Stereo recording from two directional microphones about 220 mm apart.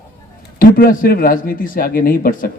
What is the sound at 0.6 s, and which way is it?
A man's voice, 40° left (ahead or behind).